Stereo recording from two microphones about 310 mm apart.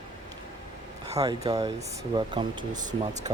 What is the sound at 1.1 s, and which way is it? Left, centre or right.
Speech, centre.